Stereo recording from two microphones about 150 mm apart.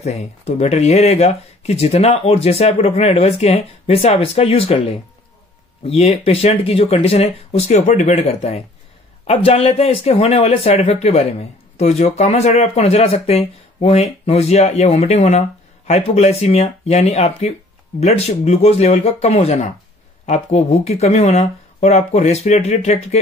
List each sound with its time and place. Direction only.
0.0 s speech: 45° left (ahead or behind)